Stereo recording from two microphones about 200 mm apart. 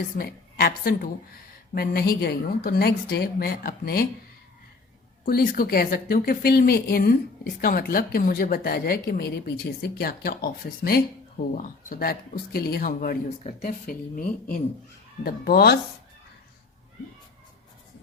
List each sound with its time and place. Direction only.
0.2 s a woman's voice: 45° left (ahead or behind)
5.2 s speech: 50° left (ahead or behind)
15.2 s speech: 50° left (ahead or behind)